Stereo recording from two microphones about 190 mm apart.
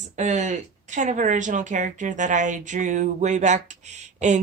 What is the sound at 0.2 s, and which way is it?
A woman's voice, 40° right (ahead or behind).